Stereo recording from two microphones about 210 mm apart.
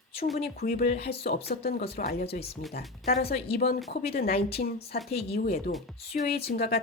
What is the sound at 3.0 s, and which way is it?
Speech, 45° left (ahead or behind).